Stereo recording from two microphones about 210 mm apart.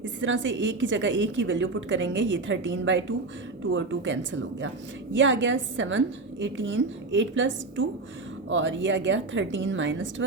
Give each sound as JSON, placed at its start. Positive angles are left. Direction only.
{"t": 0.0, "sound": "a woman's voice", "side_deg": -65}